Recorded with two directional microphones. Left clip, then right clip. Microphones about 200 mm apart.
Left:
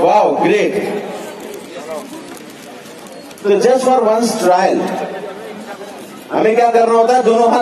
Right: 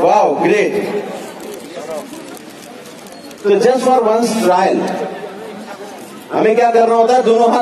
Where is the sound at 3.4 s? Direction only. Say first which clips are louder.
Even; 55° left (ahead or behind).